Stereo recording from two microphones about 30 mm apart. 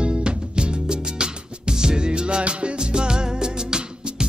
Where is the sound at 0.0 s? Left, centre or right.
Right.